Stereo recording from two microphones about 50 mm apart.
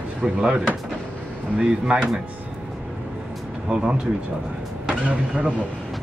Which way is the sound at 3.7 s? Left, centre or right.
Centre.